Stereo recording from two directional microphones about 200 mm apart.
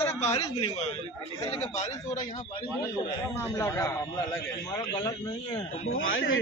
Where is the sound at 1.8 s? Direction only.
35° left (ahead or behind).